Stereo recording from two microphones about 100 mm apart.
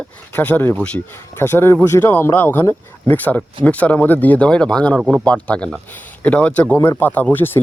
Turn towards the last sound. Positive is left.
turn(degrees=20)  # may be behind; listen again after turning